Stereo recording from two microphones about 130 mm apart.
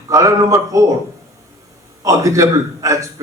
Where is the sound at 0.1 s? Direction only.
25° right (ahead or behind).